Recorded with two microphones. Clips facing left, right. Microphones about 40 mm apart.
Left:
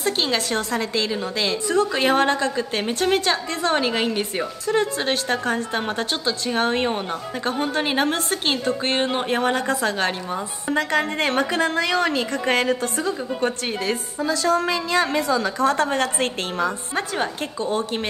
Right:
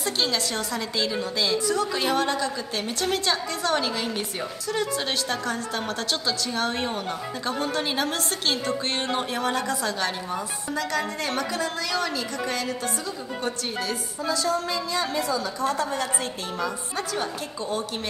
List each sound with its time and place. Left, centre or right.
0.0 s a woman's voice: left